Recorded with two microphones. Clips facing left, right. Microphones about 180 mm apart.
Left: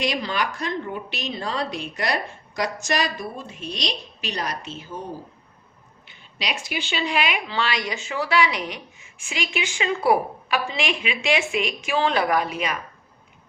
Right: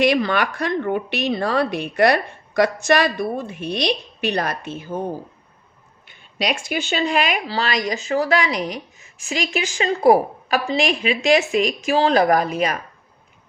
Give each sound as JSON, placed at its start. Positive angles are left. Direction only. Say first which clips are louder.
{"t": 0.0, "sound": "a woman's voice", "louder": "right 7 dB", "side_deg": -60}